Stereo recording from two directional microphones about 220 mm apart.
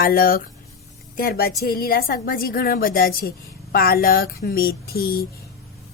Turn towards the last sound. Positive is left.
turn(degrees=45)  # may be behind; listen again after turning